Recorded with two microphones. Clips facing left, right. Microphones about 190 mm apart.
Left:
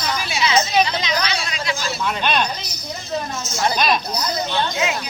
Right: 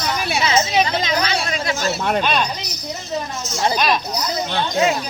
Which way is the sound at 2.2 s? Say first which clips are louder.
Right 1 dB; centre (ahead or behind).